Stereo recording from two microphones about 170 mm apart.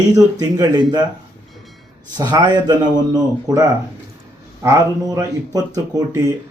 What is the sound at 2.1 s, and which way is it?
Speech, 25° right (ahead or behind).